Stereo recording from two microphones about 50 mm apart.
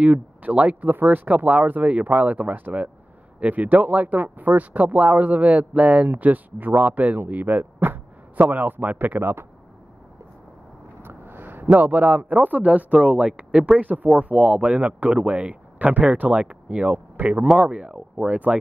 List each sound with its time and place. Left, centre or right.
0.0 s speech: right
11.0 s vehicle: right
11.7 s speech: right
13.7 s speech: right
17.6 s speech: right